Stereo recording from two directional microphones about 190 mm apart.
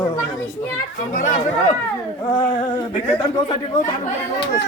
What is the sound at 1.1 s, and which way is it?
Speech, 45° left (ahead or behind).